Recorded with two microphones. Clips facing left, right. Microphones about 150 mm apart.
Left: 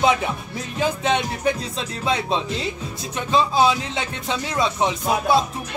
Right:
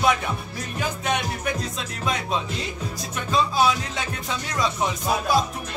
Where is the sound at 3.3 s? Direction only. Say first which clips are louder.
Left 3 dB; 25° left (ahead or behind).